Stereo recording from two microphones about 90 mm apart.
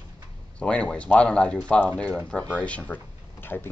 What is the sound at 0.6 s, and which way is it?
Speech, 15° left (ahead or behind).